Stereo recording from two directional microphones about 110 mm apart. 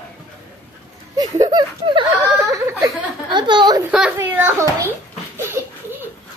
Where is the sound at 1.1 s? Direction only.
35° right (ahead or behind).